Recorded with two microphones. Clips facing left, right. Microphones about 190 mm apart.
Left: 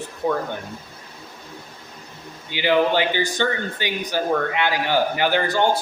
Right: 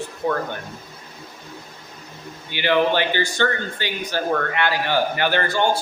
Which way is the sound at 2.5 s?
15° left (ahead or behind).